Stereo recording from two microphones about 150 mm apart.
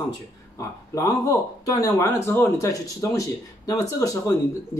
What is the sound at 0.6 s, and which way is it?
Speech, 20° left (ahead or behind).